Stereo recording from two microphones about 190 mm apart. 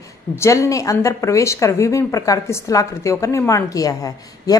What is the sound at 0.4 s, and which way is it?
Speech, 15° left (ahead or behind).